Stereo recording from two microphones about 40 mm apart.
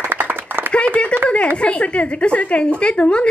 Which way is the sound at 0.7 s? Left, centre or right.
Left.